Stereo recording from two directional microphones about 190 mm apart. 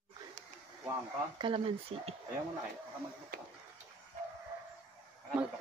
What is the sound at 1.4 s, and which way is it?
Speech, 30° right (ahead or behind).